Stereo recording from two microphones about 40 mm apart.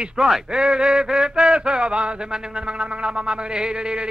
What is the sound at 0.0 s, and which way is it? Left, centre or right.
Speech, centre.